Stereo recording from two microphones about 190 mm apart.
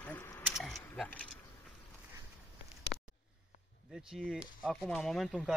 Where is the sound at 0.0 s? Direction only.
10° left (ahead or behind).